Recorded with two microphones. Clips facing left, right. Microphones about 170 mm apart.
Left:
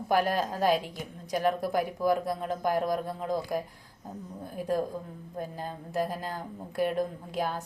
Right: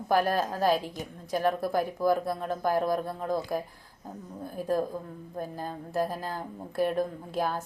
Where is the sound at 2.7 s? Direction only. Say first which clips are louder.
Right 1 dB; 15° left (ahead or behind).